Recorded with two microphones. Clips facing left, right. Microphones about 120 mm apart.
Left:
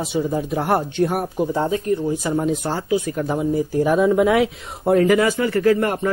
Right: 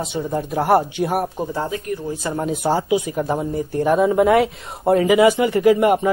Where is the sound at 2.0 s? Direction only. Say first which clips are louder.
Left 3 dB; 15° left (ahead or behind).